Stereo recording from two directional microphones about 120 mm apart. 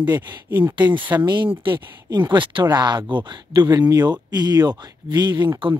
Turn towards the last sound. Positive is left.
turn(degrees=-35)  # may be behind; listen again after turning